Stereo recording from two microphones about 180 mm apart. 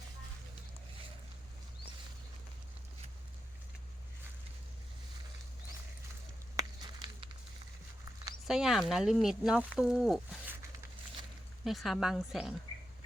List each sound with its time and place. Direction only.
6.6 s a sound: 25° right (ahead or behind)
8.4 s speech: centre (ahead or behind)
11.6 s speech: centre (ahead or behind)